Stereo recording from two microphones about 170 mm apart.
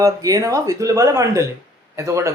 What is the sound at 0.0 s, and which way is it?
Speech, 20° right (ahead or behind).